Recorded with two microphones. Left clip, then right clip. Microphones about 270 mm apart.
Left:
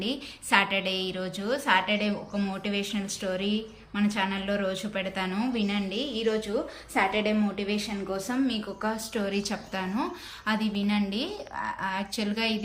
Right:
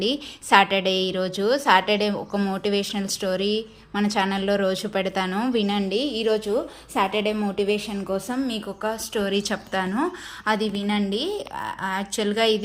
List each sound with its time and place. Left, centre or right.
0.0 s a woman's voice: centre